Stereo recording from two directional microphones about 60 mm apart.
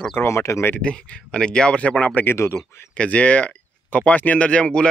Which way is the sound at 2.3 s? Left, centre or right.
Left.